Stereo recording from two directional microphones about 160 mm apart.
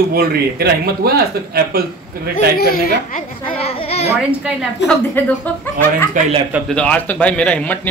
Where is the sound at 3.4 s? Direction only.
35° left (ahead or behind).